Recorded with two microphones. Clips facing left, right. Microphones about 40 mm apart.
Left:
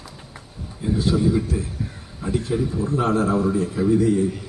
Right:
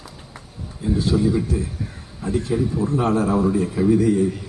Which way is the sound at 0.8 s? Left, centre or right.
Centre.